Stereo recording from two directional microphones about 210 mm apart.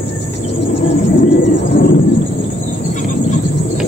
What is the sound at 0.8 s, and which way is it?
Bird, 55° left (ahead or behind).